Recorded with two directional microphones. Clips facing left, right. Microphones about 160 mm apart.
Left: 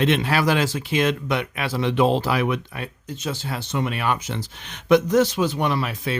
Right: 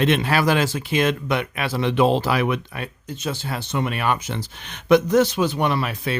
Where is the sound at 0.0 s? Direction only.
50° right (ahead or behind).